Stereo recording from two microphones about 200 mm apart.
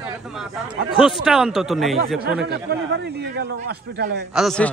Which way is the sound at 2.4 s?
55° right (ahead or behind).